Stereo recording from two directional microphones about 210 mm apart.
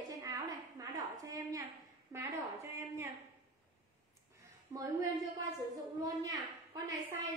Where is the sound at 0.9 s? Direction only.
15° right (ahead or behind).